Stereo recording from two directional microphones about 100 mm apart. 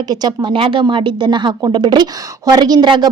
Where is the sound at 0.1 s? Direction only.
45° right (ahead or behind).